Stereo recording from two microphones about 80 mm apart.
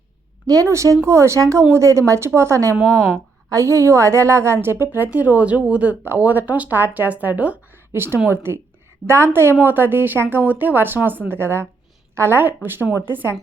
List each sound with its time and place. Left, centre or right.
0.4 s a woman's voice: right